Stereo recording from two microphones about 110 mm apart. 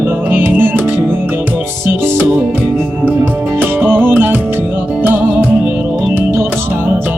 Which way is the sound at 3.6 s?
15° right (ahead or behind).